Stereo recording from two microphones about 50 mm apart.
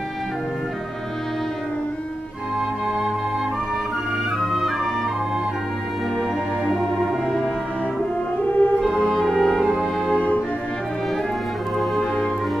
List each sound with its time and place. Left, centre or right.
4.5 s music: centre
6.7 s music: centre
8.5 s music: left
9.0 s music: centre
9.5 s brass instrument: centre
10.1 s music: left
11.8 s music: centre